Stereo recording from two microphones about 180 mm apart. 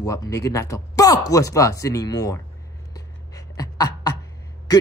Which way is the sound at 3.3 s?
20° left (ahead or behind).